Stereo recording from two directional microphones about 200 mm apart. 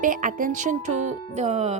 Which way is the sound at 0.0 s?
40° right (ahead or behind).